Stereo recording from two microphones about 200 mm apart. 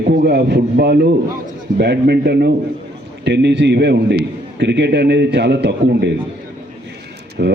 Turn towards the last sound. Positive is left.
turn(degrees=-50)  # may be behind; listen again after turning